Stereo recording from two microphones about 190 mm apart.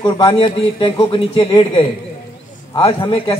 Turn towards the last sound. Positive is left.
turn(degrees=30)  # may be behind; listen again after turning